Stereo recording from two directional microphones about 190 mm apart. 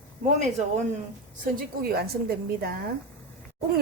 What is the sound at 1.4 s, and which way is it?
A woman's voice, 50° right (ahead or behind).